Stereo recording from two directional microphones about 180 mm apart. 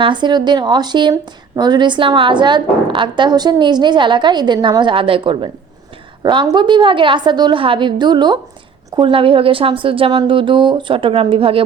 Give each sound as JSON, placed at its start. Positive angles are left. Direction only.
{"t": 0.0, "sound": "a woman's voice", "side_deg": -25}